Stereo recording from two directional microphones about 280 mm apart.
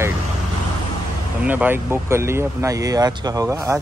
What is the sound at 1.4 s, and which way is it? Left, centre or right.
Speech, centre.